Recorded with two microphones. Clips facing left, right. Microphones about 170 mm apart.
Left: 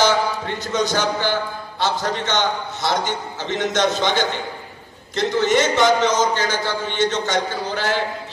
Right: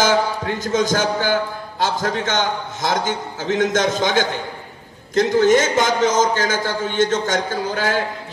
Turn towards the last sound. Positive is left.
turn(degrees=-50)  # may be behind; listen again after turning